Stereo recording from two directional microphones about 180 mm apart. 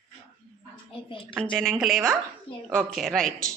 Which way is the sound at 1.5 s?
Centre (ahead or behind).